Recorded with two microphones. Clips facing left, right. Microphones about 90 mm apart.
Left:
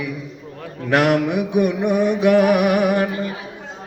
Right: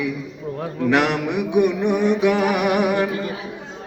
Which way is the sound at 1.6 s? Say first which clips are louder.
Even; 50° left (ahead or behind).